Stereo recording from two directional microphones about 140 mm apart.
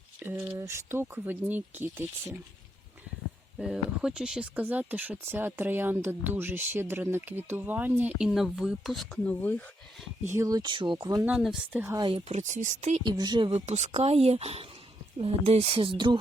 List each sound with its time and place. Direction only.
0.2 s speech: 15° right (ahead or behind)
3.6 s speech: 5° right (ahead or behind)
10.2 s speech: 20° right (ahead or behind)
11.3 s speech: 5° right (ahead or behind)
11.9 s speech: 35° right (ahead or behind)
12.3 s speech: 60° right (ahead or behind)
13.1 s speech: 30° right (ahead or behind)
13.7 s speech: 50° right (ahead or behind)